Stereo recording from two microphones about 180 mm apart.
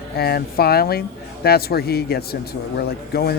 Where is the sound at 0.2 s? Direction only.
60° left (ahead or behind).